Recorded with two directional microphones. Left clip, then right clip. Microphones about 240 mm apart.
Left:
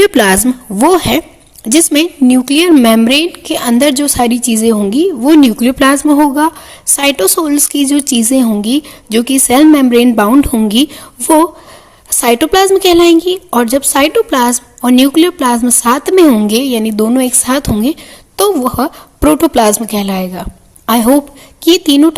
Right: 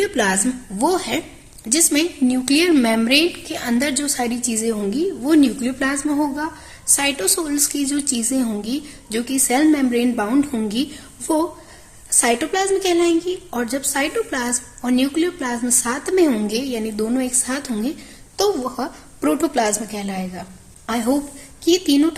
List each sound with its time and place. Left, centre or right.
0.0 s a woman's voice: left
12.2 s a woman's voice: left